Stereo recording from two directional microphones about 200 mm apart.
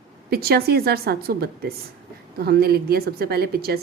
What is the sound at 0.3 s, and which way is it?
A woman's voice, 50° right (ahead or behind).